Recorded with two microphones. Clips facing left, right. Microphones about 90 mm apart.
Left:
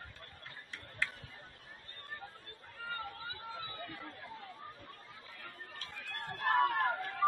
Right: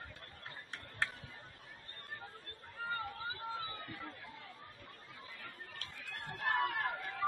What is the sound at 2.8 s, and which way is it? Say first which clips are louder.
Chatter: right 2 dB; 35° right (ahead or behind).